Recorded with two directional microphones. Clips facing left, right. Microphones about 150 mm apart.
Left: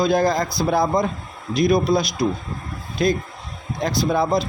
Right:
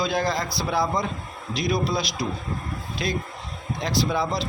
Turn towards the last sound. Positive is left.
turn(degrees=50)  # may be behind; listen again after turning